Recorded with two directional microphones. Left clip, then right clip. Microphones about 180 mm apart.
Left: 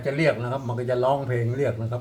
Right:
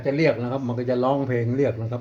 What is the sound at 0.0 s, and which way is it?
Speech, 45° right (ahead or behind).